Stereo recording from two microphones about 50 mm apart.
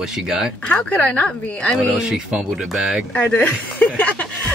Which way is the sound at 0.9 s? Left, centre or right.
Left.